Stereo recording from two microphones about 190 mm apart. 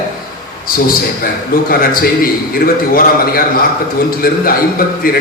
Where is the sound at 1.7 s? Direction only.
50° left (ahead or behind).